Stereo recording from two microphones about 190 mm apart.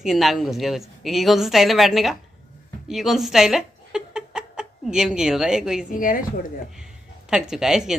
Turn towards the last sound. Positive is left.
turn(degrees=-5)  # may be behind; listen again after turning